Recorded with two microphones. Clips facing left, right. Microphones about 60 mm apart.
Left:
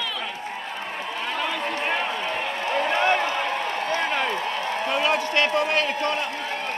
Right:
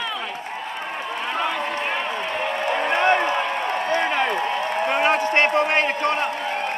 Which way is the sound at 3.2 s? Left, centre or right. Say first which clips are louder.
Right 3 dB; right.